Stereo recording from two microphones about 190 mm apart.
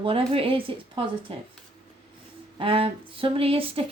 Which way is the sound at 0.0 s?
30° right (ahead or behind).